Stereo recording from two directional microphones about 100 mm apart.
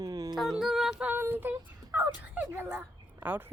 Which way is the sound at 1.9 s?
20° right (ahead or behind).